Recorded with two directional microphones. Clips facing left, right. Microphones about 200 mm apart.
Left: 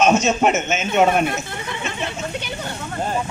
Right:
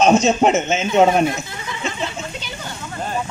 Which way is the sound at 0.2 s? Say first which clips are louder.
Right 3 dB; 30° right (ahead or behind).